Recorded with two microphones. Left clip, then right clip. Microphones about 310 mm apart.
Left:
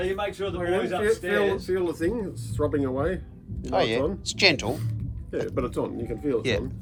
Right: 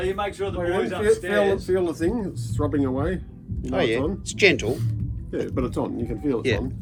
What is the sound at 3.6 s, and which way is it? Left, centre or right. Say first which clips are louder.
Speech: right 1 dB; centre.